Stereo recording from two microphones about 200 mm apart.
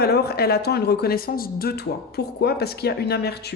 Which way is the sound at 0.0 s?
50° left (ahead or behind).